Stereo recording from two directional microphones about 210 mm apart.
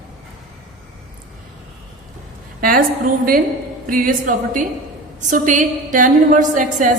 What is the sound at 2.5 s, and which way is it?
Speech, 45° right (ahead or behind).